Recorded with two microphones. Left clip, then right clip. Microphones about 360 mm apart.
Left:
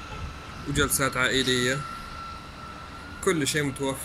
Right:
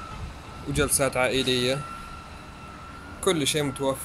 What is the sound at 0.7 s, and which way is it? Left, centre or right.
Speech, centre.